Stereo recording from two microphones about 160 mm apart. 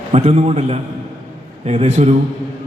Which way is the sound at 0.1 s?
40° right (ahead or behind).